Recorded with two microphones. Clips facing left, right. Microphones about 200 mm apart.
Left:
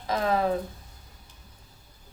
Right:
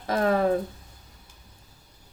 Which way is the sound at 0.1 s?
50° right (ahead or behind).